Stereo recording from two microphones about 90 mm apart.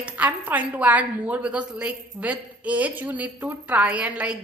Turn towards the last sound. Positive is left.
turn(degrees=-15)  # may be behind; listen again after turning